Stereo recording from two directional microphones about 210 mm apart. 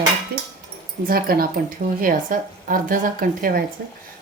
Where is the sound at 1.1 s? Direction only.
45° right (ahead or behind).